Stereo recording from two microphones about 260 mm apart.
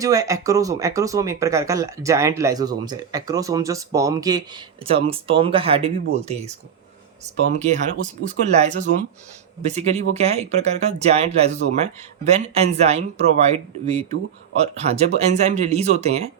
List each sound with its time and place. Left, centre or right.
0.0 s speech: centre
7.5 s speech: right